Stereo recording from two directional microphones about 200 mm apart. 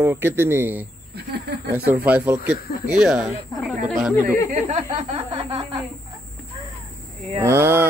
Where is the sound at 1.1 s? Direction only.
55° right (ahead or behind).